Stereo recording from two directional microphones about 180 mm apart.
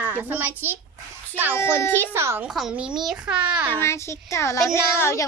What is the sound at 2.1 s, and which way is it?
Speech, 15° right (ahead or behind).